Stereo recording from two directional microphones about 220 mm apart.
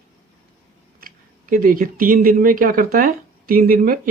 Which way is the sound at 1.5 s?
40° right (ahead or behind).